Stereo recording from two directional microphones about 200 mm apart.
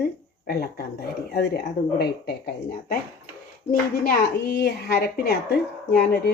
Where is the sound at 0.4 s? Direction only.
50° left (ahead or behind).